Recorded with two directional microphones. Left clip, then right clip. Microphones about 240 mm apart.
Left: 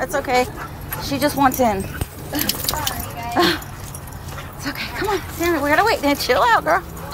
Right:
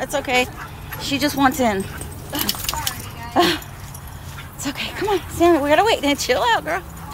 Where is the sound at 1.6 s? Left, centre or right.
Centre.